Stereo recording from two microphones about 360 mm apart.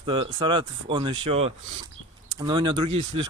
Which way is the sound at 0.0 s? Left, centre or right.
Centre.